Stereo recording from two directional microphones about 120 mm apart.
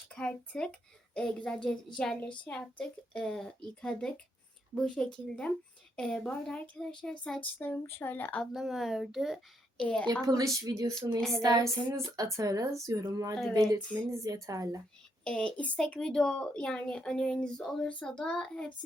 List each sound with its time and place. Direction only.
0.1 s a woman's voice: 10° left (ahead or behind)
7.6 s speech: 20° left (ahead or behind)
8.5 s a woman's voice: centre (ahead or behind)
9.8 s speech: 10° left (ahead or behind)
10.2 s speech: 30° right (ahead or behind)
11.2 s a woman's voice: centre (ahead or behind)
11.4 s speech: 30° right (ahead or behind)
15.2 s speech: 10° left (ahead or behind)